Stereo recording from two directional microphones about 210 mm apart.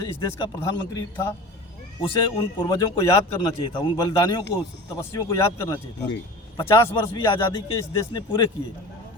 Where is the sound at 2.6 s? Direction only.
20° left (ahead or behind).